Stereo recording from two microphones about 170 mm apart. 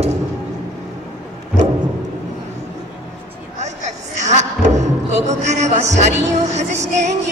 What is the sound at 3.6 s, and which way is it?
Speech, 40° right (ahead or behind).